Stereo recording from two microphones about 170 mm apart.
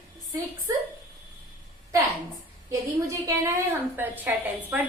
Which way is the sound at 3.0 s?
20° right (ahead or behind).